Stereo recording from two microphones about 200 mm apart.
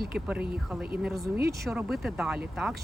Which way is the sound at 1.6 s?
Centre (ahead or behind).